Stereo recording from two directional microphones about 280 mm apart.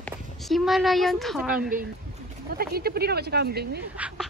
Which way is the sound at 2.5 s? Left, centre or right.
Right.